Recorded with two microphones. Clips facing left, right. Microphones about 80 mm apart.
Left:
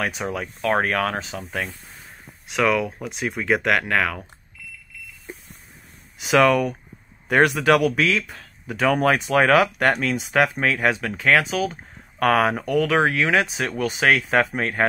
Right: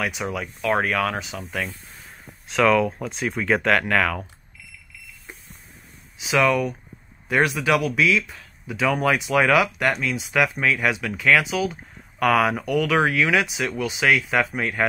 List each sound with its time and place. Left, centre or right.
0.0 s speech: left
2.4 s speech: centre
6.1 s speech: left
10.3 s speech: left
11.5 s speech: left